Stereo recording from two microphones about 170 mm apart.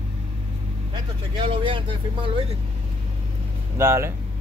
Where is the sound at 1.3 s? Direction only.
30° right (ahead or behind).